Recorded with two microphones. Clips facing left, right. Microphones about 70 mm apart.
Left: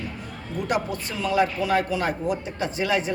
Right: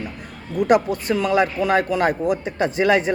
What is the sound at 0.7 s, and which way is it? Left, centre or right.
Speech, right.